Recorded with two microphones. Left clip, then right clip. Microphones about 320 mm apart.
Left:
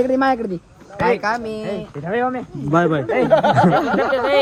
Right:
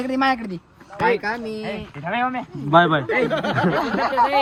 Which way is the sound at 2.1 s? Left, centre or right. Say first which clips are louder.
Left 2 dB; centre.